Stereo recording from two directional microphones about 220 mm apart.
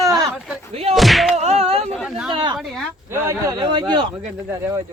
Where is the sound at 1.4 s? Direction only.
30° right (ahead or behind).